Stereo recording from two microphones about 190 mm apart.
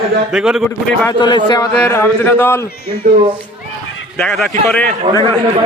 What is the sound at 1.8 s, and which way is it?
Speech, 10° left (ahead or behind).